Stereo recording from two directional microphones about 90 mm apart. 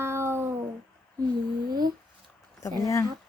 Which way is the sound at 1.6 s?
50° right (ahead or behind).